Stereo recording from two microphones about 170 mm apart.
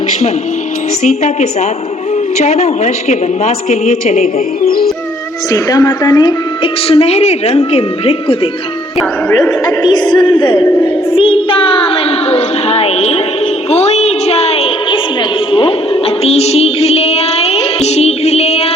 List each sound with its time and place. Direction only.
1.0 s a woman's voice: 45° left (ahead or behind)
4.6 s music: 60° left (ahead or behind)
5.5 s a woman's voice: 20° left (ahead or behind)
9.6 s a woman's voice: 25° left (ahead or behind)
10.7 s speech: 15° left (ahead or behind)
11.1 s child singing: 30° left (ahead or behind)
13.7 s a sound: 40° left (ahead or behind)